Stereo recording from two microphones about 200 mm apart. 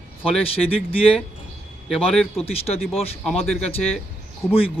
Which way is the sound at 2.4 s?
30° left (ahead or behind).